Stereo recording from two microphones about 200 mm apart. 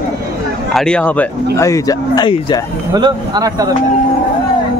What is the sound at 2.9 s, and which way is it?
Speech, 20° right (ahead or behind).